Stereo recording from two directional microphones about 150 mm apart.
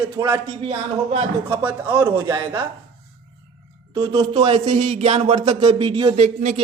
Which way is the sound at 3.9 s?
25° right (ahead or behind).